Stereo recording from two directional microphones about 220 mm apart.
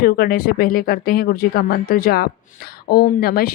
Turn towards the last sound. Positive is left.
turn(degrees=45)  # may be behind; listen again after turning